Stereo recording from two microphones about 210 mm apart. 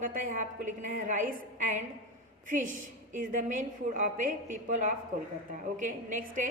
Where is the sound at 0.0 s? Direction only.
40° right (ahead or behind).